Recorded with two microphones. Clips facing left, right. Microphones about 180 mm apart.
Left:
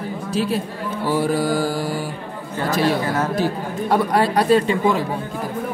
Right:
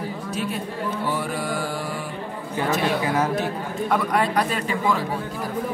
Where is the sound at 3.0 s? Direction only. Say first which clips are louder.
Left 1 dB; 15° right (ahead or behind).